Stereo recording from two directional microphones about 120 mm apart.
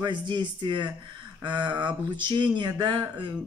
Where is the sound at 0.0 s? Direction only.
40° right (ahead or behind).